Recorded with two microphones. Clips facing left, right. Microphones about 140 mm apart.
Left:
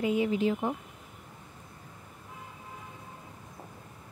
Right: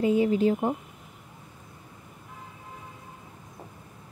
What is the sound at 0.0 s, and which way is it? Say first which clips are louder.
Speech: right 5 dB; 35° right (ahead or behind).